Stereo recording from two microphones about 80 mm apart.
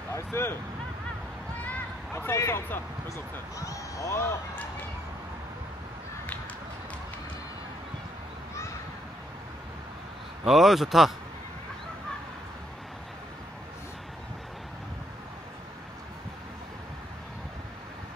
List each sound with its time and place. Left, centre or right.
0.1 s vehicle: left
1.6 s a sound: left
3.5 s speech: left
10.4 s speech: centre